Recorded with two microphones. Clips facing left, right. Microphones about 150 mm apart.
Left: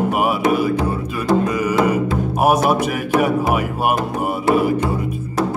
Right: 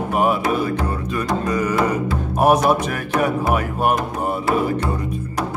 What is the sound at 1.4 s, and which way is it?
Music, 10° left (ahead or behind).